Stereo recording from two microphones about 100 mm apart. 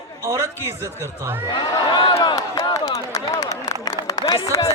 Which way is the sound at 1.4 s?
45° left (ahead or behind).